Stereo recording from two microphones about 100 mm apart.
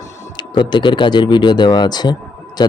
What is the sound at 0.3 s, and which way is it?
Speech, 50° left (ahead or behind).